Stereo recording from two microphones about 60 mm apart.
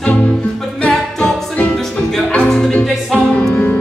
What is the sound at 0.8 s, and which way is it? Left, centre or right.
Music, centre.